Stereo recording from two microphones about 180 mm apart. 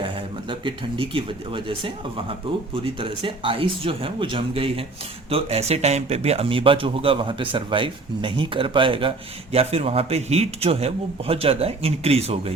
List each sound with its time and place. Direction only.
0.6 s speech: 30° right (ahead or behind)